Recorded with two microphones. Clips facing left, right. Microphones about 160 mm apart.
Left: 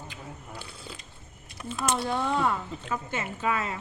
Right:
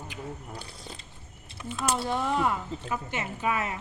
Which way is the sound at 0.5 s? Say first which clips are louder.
Even; 35° right (ahead or behind).